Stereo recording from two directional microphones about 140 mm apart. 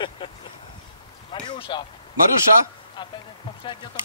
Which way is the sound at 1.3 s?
40° left (ahead or behind).